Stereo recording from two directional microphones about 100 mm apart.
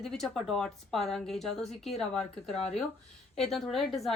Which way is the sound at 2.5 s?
90° left.